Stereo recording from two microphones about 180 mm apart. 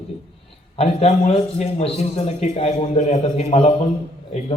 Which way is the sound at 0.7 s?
35° left (ahead or behind).